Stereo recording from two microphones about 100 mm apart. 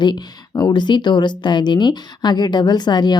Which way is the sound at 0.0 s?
45° left (ahead or behind).